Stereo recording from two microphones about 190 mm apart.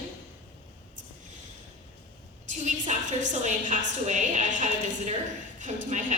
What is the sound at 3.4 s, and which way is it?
A woman's voice, 40° right (ahead or behind).